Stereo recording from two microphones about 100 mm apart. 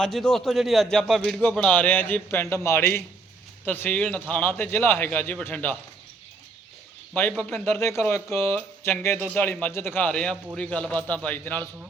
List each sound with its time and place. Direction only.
0.0 s a man's voice: 5° left (ahead or behind)
1.4 s a man's voice: 10° left (ahead or behind)
7.1 s a man's voice: 15° left (ahead or behind)